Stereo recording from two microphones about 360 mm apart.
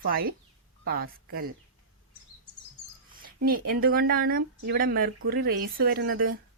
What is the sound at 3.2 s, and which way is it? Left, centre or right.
Speech, right.